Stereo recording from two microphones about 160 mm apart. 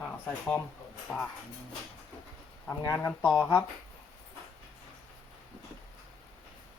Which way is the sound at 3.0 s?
10° left (ahead or behind).